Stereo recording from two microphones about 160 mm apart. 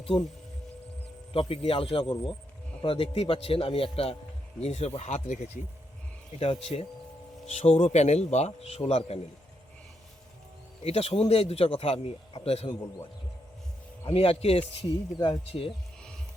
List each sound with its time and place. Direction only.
1.3 s speech: 35° left (ahead or behind)
10.8 s speech: 40° left (ahead or behind)
14.1 s speech: 35° left (ahead or behind)